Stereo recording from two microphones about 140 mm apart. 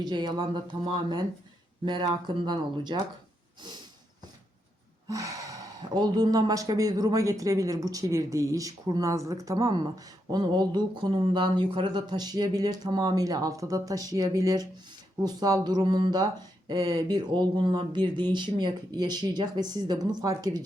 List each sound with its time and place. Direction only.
0.0 s speech: 30° right (ahead or behind)
5.0 s speech: 25° right (ahead or behind)